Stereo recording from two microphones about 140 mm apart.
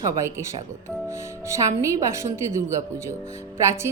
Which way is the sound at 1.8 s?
20° right (ahead or behind).